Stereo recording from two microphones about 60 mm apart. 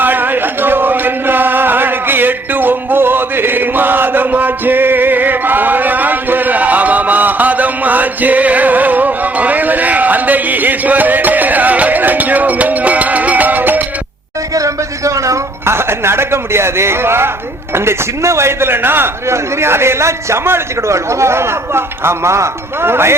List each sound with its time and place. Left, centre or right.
0.0 s chant: right
14.5 s a sound: right
15.6 s speech: right